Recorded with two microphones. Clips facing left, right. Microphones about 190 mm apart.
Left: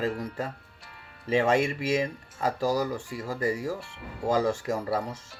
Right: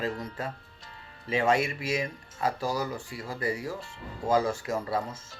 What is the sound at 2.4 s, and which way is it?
Speech, 40° left (ahead or behind).